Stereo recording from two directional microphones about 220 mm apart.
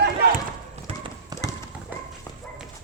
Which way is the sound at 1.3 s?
15° right (ahead or behind).